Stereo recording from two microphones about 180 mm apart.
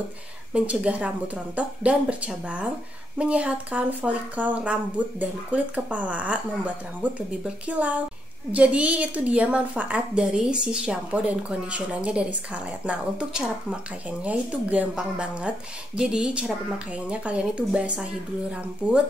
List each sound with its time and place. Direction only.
0.5 s a woman's voice: 5° right (ahead or behind)